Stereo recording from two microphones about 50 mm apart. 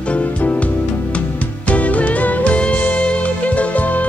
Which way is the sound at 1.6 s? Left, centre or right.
Left.